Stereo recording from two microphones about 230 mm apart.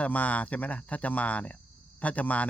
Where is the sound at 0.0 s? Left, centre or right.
Centre.